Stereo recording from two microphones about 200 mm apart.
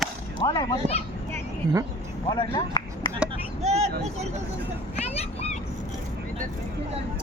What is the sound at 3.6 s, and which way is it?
Vehicle, 35° right (ahead or behind).